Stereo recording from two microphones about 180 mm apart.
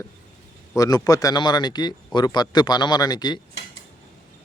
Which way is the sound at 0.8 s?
20° left (ahead or behind).